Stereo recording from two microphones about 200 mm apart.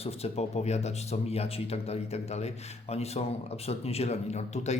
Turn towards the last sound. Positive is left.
turn(degrees=35)  # may be behind; listen again after turning